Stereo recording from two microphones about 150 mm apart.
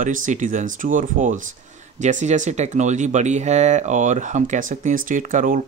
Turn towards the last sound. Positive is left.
turn(degrees=-60)  # may be behind; listen again after turning